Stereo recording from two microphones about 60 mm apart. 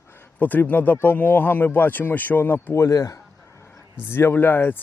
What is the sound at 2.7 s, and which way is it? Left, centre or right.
Speech, left.